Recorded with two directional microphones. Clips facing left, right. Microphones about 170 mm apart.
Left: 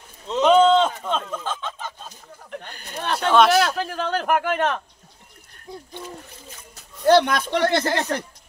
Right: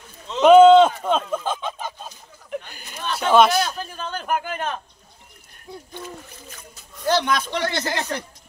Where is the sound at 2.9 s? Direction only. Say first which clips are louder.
Left 3 dB; 60° left (ahead or behind).